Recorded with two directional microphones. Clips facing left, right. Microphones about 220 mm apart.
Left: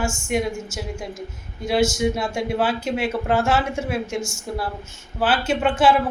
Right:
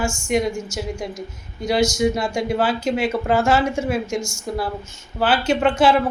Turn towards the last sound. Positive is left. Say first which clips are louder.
# right 2 dB
turn(degrees=5)  # may be behind; listen again after turning